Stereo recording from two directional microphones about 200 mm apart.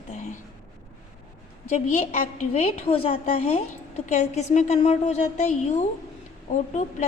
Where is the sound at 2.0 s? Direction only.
35° left (ahead or behind).